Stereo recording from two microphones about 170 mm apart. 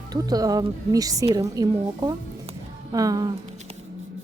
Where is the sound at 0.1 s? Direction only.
20° right (ahead or behind).